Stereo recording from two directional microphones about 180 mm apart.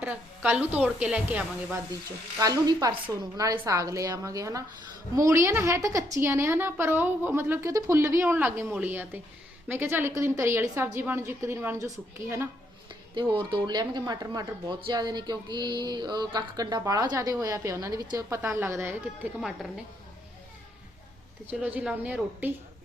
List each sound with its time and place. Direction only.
0.0 s a woman's voice: 5° right (ahead or behind)
2.4 s a woman's voice: 20° right (ahead or behind)
13.3 s speech: 30° right (ahead or behind); by 19.7 s centre (ahead or behind)
21.6 s a woman's voice: 10° right (ahead or behind)